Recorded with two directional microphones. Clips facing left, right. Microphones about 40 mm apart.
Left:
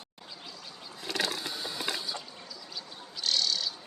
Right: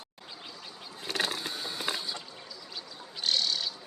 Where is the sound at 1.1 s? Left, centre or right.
Right.